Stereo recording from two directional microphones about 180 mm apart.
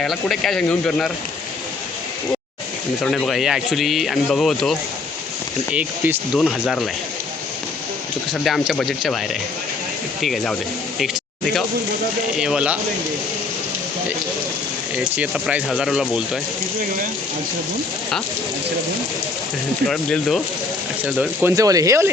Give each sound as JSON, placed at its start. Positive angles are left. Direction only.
{"t": 0.0, "sound": "speech", "side_deg": 0}
{"t": 3.0, "sound": "speech", "side_deg": 5}
{"t": 8.3, "sound": "speech", "side_deg": 0}
{"t": 12.4, "sound": "speech", "side_deg": -5}
{"t": 14.9, "sound": "speech", "side_deg": -5}
{"t": 19.9, "sound": "speech", "side_deg": 0}
{"t": 21.2, "sound": "speech", "side_deg": -15}